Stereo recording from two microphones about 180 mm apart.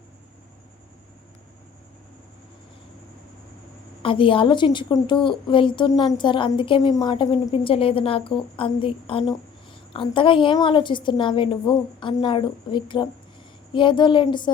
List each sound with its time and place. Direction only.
4.0 s a woman's voice: 30° left (ahead or behind)